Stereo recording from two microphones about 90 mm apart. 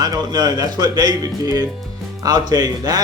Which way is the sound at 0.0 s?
50° right (ahead or behind).